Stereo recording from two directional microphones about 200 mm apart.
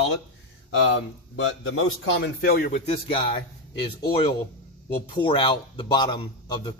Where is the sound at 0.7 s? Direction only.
75° left (ahead or behind).